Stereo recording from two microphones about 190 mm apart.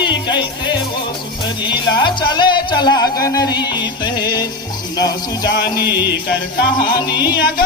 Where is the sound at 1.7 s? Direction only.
25° left (ahead or behind).